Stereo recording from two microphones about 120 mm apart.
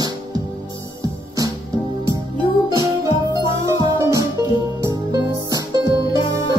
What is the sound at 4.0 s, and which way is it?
Music, 25° right (ahead or behind).